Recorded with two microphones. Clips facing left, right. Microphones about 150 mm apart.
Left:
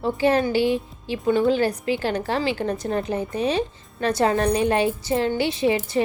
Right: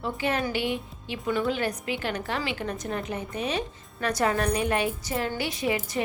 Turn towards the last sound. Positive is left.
turn(degrees=25)  # may be behind; listen again after turning